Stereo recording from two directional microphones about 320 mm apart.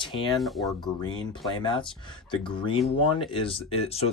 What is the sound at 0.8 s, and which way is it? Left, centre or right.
Speech, centre.